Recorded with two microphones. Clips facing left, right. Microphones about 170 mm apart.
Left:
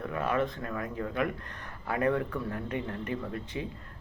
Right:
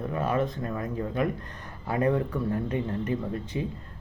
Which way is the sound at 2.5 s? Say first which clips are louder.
Right 5 dB; 30° right (ahead or behind).